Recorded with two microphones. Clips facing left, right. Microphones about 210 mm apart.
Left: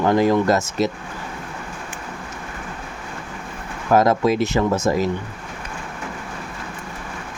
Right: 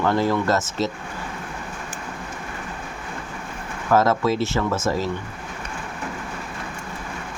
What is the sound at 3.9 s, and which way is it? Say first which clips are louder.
Speech: left 3 dB; 15° left (ahead or behind).